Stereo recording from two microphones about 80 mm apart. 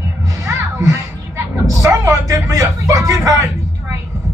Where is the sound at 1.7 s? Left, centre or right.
Right.